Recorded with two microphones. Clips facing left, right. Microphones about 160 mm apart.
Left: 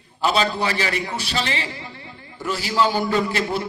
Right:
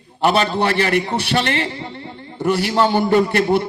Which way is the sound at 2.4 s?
60° right (ahead or behind).